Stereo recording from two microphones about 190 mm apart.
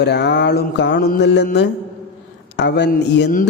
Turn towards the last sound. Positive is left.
turn(degrees=65)  # may be behind; listen again after turning